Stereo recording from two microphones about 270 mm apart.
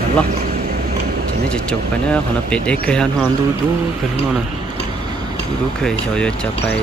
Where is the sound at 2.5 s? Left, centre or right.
Centre.